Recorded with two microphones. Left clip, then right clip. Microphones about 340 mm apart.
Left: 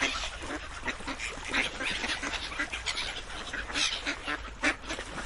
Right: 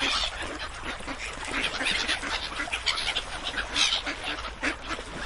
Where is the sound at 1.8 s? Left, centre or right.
Centre.